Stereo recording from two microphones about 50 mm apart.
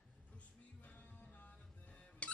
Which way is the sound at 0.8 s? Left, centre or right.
Left.